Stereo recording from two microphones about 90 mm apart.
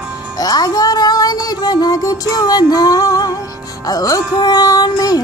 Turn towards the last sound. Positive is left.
turn(degrees=45)  # may be behind; listen again after turning